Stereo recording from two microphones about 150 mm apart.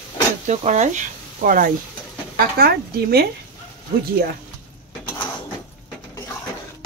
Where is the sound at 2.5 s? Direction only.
85° right.